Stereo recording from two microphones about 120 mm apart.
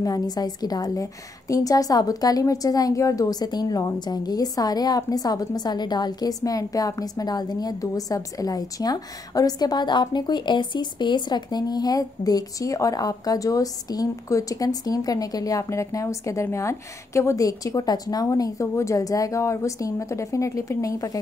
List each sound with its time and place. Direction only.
0.0 s a woman's voice: 30° left (ahead or behind)